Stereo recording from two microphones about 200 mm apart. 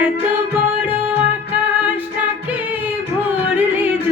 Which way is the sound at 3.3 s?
10° right (ahead or behind).